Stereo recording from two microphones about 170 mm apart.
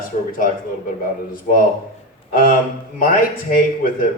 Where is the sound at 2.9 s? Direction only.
55° left (ahead or behind).